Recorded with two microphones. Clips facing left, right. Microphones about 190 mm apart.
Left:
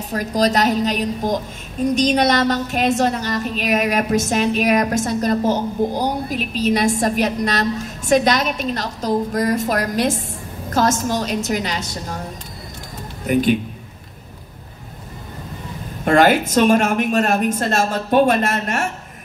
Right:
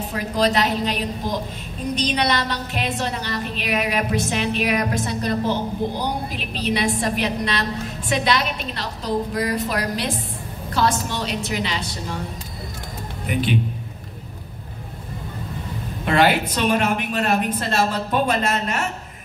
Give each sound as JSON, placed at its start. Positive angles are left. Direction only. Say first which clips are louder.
{"t": 0.1, "sound": "a woman's voice", "louder": "left 3 dB", "side_deg": 40}
{"t": 13.3, "sound": "a woman's voice", "louder": "left 6 dB", "side_deg": 45}
{"t": 16.1, "sound": "a woman's voice", "louder": "left 4 dB", "side_deg": 45}